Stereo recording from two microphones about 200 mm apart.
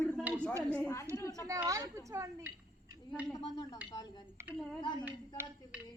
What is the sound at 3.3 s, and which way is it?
Speech, 20° left (ahead or behind).